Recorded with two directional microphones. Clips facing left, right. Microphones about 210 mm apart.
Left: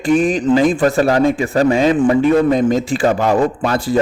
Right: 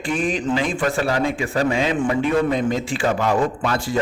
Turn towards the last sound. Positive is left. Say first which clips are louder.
# left 6 dB
turn(degrees=35)  # may be behind; listen again after turning